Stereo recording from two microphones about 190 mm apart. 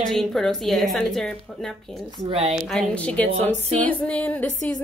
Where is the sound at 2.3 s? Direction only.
30° right (ahead or behind).